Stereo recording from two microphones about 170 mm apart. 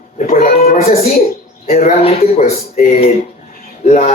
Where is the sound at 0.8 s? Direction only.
35° left (ahead or behind).